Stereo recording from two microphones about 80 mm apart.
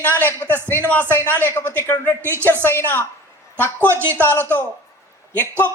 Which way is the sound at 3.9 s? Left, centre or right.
Right.